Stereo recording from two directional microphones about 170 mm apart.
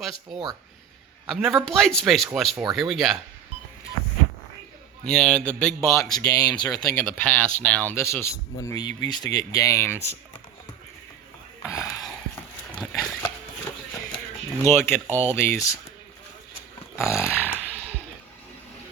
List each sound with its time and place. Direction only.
0.0 s speech: centre (ahead or behind)
5.0 s speech: 5° left (ahead or behind)
5.8 s speech: 15° left (ahead or behind)
6.9 s speech: 10° left (ahead or behind)
11.6 s speech: 20° left (ahead or behind)
12.8 s a sound: centre (ahead or behind)
14.6 s speech: 15° left (ahead or behind)
17.0 s speech: 15° left (ahead or behind)